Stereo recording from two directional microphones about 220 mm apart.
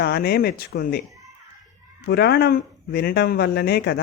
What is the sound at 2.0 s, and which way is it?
Speech, 45° left (ahead or behind).